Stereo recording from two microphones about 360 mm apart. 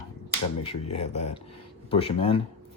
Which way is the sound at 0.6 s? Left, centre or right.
Centre.